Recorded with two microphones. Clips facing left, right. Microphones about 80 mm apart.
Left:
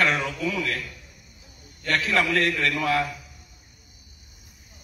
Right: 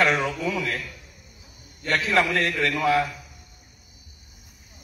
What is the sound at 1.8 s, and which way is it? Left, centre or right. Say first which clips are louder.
A man's voice: right 2 dB; right.